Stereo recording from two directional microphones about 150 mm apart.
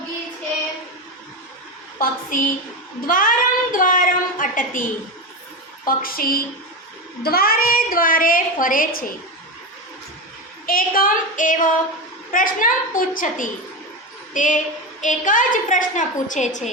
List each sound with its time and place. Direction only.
2.0 s a child's voice: 70° left (ahead or behind)
10.7 s a woman's voice: 70° left (ahead or behind); by 16.6 s 55° left (ahead or behind)